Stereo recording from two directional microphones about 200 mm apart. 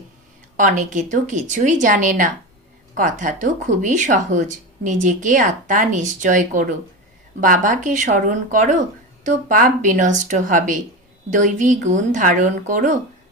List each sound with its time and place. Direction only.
0.5 s speech: 40° right (ahead or behind)